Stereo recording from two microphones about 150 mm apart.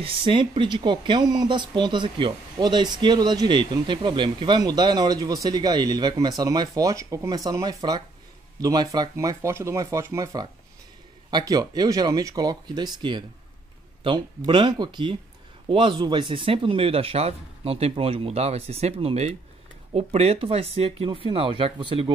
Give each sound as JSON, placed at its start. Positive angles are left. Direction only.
{"t": 0.0, "sound": "speech", "side_deg": -35}